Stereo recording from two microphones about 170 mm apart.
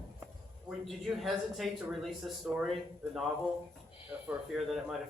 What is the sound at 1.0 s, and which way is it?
Speech, centre (ahead or behind).